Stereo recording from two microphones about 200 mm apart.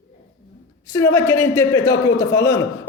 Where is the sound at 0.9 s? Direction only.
10° left (ahead or behind).